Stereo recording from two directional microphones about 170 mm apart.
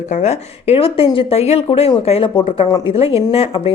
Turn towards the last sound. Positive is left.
turn(degrees=35)  # may be behind; listen again after turning